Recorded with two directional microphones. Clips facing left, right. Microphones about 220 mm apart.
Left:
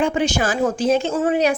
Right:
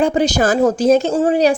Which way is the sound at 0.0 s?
40° right (ahead or behind).